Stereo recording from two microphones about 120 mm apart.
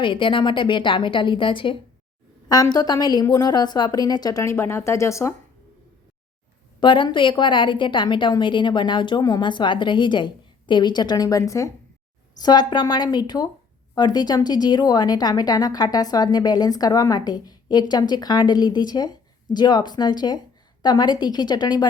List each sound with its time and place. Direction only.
0.0 s a woman's voice: 45° left (ahead or behind)
2.5 s speech: 30° left (ahead or behind)
6.7 s speech: 40° left (ahead or behind)